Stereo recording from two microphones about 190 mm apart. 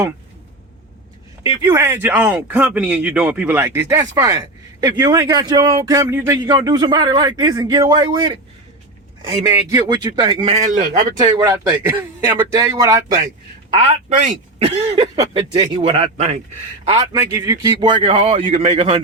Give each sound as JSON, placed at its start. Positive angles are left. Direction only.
{"t": 1.5, "sound": "speech", "side_deg": -15}
{"t": 9.5, "sound": "speech", "side_deg": -15}
{"t": 10.6, "sound": "a man's voice", "side_deg": -40}
{"t": 11.2, "sound": "speech", "side_deg": -15}
{"t": 13.7, "sound": "speech", "side_deg": -35}
{"t": 14.9, "sound": "speech", "side_deg": -20}
{"t": 16.9, "sound": "speech", "side_deg": -20}